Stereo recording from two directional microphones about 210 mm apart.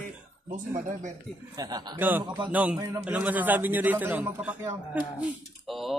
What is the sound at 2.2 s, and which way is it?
Speech, 20° right (ahead or behind).